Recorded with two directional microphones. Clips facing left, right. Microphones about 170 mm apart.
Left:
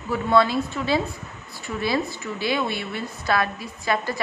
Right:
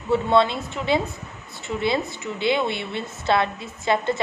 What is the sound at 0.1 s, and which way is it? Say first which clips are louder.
A woman's voice: right 1 dB; 25° right (ahead or behind).